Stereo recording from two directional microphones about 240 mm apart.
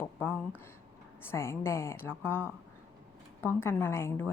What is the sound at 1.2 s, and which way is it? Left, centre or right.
A woman's voice, centre.